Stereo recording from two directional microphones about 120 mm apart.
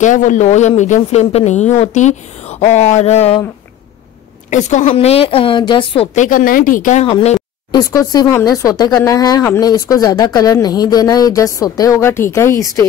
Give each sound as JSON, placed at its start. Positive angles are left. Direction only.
{"t": 0.0, "sound": "speech", "side_deg": 90}
{"t": 4.5, "sound": "a woman's voice", "side_deg": 80}
{"t": 4.9, "sound": "a woman's voice", "side_deg": 55}
{"t": 6.1, "sound": "speech", "side_deg": 90}
{"t": 7.7, "sound": "a woman's voice", "side_deg": 30}